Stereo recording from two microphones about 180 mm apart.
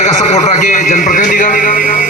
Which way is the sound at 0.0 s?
35° left (ahead or behind).